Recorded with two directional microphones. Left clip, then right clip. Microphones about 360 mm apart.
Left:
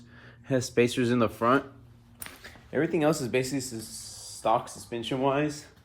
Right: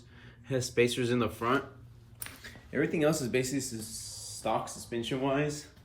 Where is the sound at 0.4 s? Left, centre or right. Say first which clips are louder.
Left 3 dB; centre.